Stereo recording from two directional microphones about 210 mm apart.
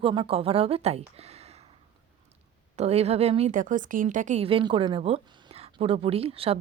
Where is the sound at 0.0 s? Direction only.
25° right (ahead or behind).